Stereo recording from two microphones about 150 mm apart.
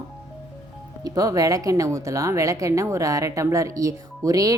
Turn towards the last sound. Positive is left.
turn(degrees=-25)  # may be behind; listen again after turning